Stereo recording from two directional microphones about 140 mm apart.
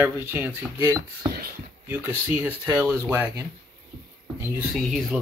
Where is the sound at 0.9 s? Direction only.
25° right (ahead or behind).